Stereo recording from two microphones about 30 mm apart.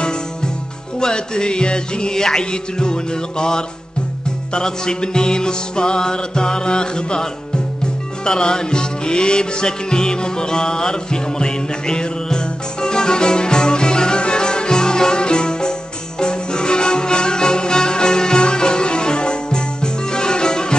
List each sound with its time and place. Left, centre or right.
0.9 s music: left
8.3 s music: left